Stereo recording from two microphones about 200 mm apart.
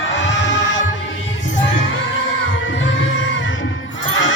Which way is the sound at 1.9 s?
75° left (ahead or behind).